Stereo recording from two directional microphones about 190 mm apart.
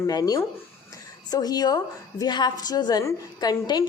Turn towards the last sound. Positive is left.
turn(degrees=20)  # may be behind; listen again after turning